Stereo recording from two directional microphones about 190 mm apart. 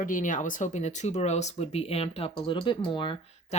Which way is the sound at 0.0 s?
45° left (ahead or behind).